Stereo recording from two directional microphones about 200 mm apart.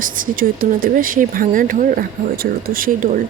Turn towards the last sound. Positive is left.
turn(degrees=-45)  # may be behind; listen again after turning